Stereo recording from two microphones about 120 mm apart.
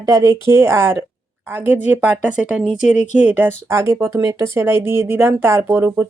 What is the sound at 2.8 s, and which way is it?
Speech, 85° left.